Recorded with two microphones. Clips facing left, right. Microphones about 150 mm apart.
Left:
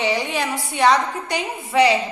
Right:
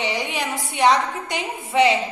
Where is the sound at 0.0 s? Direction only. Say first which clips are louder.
Left 3 dB; 15° right (ahead or behind).